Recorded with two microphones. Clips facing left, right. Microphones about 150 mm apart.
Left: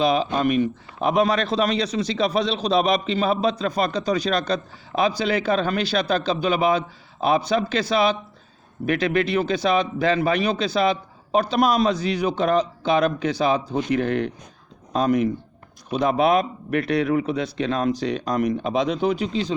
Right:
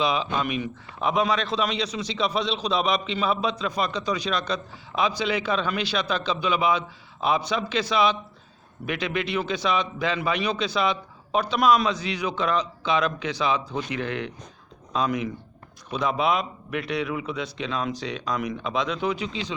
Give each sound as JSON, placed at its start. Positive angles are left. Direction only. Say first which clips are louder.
{"t": 0.0, "sound": "a man's voice", "louder": "left 5 dB", "side_deg": 45}
{"t": 11.9, "sound": "a man's voice", "louder": "left 5 dB", "side_deg": 45}